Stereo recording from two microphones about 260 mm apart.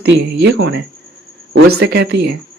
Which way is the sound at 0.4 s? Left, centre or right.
Right.